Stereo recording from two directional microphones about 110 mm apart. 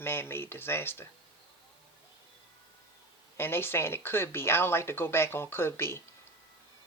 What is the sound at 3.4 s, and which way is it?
Speech, 20° left (ahead or behind).